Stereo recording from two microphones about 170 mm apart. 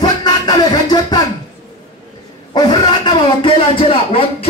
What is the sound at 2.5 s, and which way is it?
A man's voice, 25° left (ahead or behind).